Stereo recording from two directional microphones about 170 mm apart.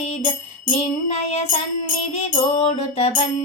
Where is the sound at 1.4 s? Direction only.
50° left (ahead or behind).